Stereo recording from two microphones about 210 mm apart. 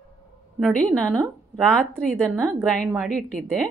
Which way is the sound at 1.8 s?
5° left (ahead or behind).